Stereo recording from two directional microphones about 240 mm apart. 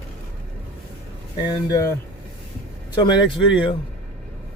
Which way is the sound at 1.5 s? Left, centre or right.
Centre.